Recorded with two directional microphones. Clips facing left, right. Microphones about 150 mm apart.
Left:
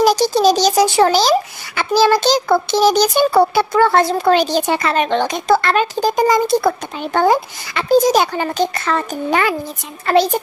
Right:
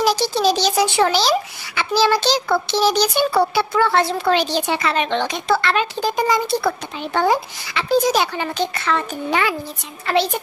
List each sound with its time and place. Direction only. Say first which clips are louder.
0.0 s a child's voice: left 5 dB; 45° left (ahead or behind)